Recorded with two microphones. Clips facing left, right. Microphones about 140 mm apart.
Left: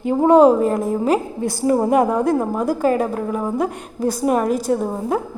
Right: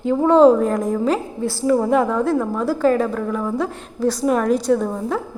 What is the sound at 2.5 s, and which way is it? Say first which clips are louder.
Speech: even; 15° left (ahead or behind).